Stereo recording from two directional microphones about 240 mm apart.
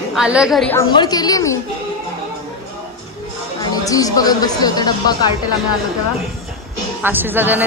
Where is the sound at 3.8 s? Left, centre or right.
Centre.